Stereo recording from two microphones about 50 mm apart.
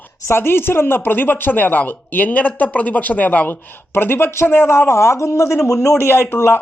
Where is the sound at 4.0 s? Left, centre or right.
Left.